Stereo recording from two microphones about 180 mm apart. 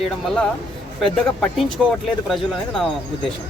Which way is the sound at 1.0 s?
5° left (ahead or behind).